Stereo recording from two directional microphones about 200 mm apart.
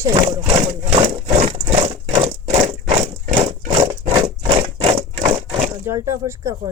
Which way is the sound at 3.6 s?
30° right (ahead or behind).